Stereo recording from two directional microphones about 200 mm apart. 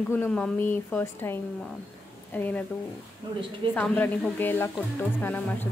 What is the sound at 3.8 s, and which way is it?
A woman's voice, 10° left (ahead or behind).